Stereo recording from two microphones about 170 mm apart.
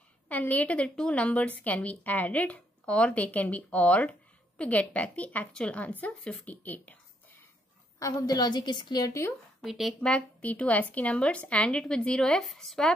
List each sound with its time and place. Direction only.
0.3 s a woman's voice: 10° left (ahead or behind)
8.0 s a woman's voice: 20° left (ahead or behind)
9.6 s speech: centre (ahead or behind)